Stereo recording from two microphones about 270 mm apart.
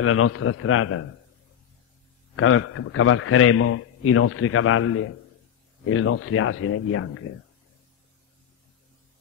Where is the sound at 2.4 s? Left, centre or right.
Left.